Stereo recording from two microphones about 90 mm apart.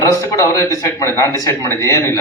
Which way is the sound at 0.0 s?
35° left (ahead or behind).